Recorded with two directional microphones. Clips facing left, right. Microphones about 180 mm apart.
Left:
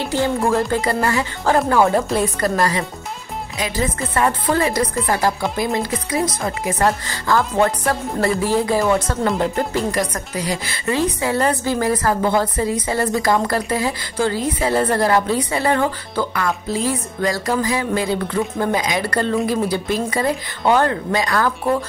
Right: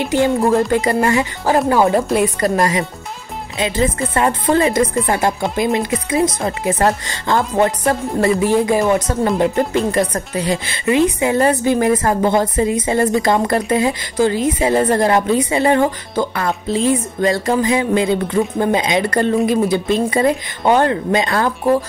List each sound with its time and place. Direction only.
0.0 s speech: 15° right (ahead or behind)